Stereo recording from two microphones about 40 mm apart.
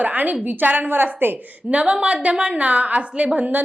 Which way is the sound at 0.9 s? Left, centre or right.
Right.